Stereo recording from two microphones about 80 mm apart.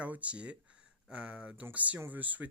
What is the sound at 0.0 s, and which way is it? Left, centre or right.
Speech, centre.